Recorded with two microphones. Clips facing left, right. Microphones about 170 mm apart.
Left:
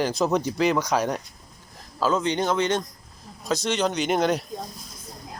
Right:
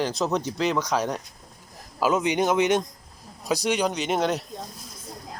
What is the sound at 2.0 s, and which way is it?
Speech, 15° right (ahead or behind).